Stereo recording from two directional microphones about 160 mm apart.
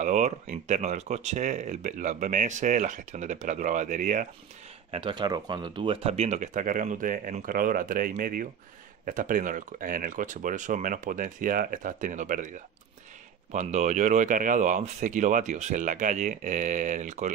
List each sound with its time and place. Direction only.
0.0 s speech: 45° right (ahead or behind)
4.9 s speech: 30° right (ahead or behind); by 17.3 s 50° right (ahead or behind)